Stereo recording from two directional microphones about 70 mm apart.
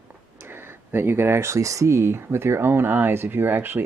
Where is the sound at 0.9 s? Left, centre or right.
Right.